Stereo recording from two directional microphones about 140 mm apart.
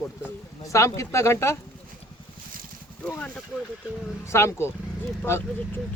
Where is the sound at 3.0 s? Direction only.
10° left (ahead or behind).